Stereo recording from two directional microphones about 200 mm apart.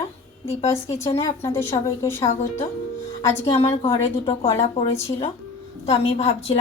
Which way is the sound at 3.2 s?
25° left (ahead or behind).